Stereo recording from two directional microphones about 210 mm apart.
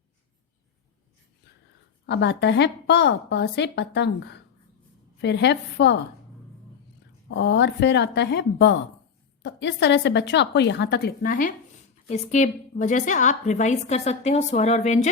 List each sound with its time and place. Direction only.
2.0 s a woman's voice: 55° left (ahead or behind)
7.3 s a woman's voice: 55° left (ahead or behind); by 15.1 s 35° left (ahead or behind)